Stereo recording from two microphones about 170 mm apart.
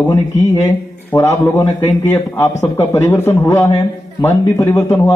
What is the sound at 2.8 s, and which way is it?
A man's voice, 15° left (ahead or behind).